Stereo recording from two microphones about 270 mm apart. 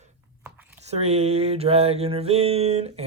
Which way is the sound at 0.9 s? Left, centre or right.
Right.